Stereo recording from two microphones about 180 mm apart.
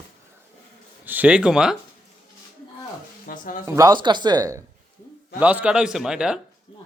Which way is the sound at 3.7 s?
20° right (ahead or behind).